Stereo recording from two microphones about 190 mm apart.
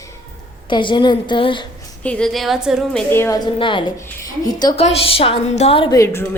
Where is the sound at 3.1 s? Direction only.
10° left (ahead or behind).